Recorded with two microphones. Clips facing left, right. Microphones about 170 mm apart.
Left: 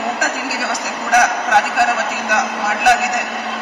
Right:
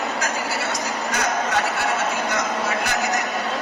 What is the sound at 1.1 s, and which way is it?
Speech, 65° left (ahead or behind).